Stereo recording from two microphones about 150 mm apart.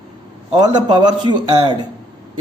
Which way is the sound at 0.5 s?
30° right (ahead or behind).